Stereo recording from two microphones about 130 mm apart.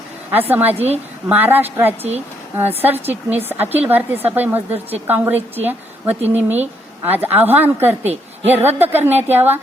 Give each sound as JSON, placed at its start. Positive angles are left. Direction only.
{"t": 0.3, "sound": "a woman's voice", "side_deg": -15}
{"t": 0.7, "sound": "a woman's voice", "side_deg": -50}
{"t": 1.3, "sound": "a woman's voice", "side_deg": -15}
{"t": 6.2, "sound": "speech", "side_deg": -55}
{"t": 7.1, "sound": "a woman's voice", "side_deg": -15}